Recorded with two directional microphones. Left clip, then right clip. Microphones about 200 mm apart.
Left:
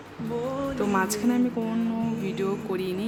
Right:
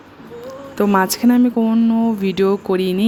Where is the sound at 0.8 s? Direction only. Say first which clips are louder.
Right 12 dB; 35° right (ahead or behind).